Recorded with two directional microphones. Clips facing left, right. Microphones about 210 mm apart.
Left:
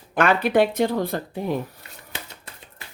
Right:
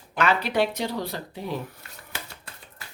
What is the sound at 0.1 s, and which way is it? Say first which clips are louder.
Speech: left 5 dB; 50° left (ahead or behind).